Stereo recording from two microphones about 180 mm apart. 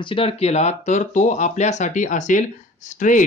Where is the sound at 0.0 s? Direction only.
30° left (ahead or behind).